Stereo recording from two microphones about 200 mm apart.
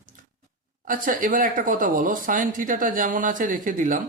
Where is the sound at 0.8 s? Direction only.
45° right (ahead or behind).